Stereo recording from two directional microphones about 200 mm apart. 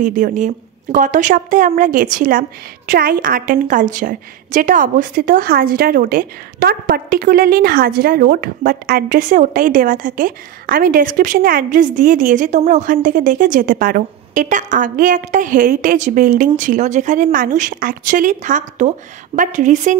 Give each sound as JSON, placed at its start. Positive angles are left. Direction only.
{"t": 0.0, "sound": "a woman's voice", "side_deg": -40}